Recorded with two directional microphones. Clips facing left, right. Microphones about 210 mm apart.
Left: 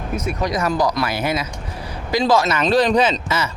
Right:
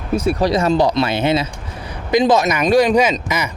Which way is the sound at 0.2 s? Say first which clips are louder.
Right 5 dB; 30° right (ahead or behind).